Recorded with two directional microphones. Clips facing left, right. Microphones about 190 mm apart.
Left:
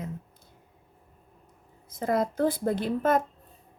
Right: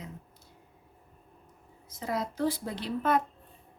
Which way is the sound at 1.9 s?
50° left (ahead or behind).